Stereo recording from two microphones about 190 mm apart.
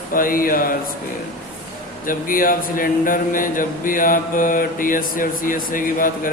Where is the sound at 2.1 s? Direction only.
45° left (ahead or behind).